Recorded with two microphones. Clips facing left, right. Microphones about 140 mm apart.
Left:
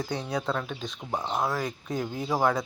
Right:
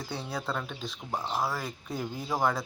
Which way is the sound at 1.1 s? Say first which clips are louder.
Left 2 dB; 20° left (ahead or behind).